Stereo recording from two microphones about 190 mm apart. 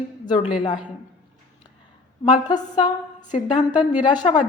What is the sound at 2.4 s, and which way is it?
A woman's voice, 25° left (ahead or behind).